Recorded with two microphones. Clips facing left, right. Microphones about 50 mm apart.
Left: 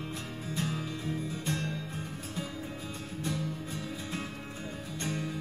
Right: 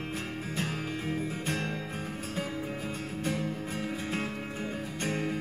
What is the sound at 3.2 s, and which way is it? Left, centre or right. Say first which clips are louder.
Music: right 2 dB; right.